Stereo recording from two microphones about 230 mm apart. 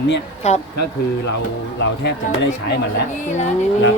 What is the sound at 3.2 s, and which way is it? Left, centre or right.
Speech, left.